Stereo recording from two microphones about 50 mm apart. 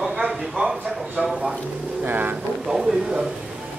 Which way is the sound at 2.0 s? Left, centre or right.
Right.